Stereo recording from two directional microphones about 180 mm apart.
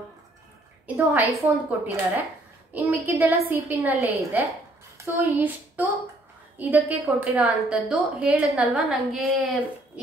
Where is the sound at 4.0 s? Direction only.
15° left (ahead or behind).